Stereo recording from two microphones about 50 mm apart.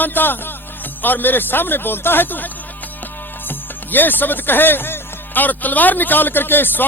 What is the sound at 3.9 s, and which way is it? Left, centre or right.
A man's voice, left.